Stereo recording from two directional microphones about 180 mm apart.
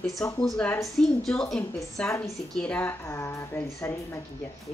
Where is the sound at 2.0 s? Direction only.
15° left (ahead or behind).